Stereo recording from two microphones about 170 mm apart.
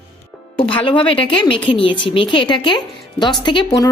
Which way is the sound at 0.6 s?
30° left (ahead or behind).